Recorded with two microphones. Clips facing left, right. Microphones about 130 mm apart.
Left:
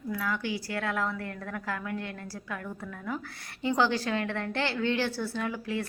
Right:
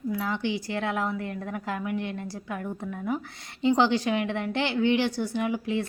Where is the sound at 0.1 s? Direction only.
20° right (ahead or behind).